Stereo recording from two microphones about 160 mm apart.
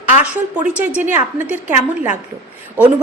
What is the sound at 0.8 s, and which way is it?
Speech, 10° right (ahead or behind).